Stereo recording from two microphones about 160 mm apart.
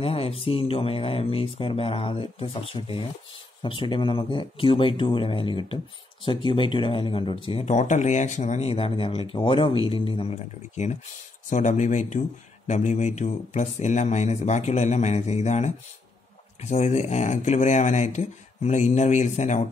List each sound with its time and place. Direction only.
0.0 s speech: 35° left (ahead or behind)
7.7 s speech: 50° left (ahead or behind)